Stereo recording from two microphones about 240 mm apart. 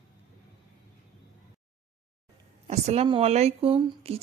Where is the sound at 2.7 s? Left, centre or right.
Right.